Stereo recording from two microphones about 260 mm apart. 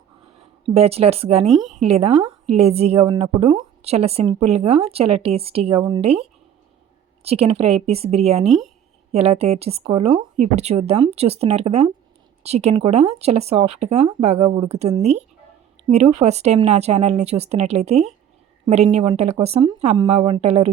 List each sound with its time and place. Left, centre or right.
0.6 s a woman's voice: right
1.5 s speech: centre
1.8 s a woman's voice: right
7.3 s a woman's voice: right
8.4 s speech: centre
9.1 s a woman's voice: right